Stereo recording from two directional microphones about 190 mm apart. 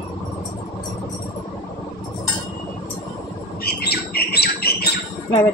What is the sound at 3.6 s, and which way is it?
Bird, 55° left (ahead or behind).